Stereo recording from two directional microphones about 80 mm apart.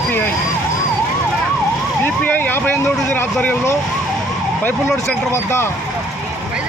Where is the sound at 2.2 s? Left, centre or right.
Left.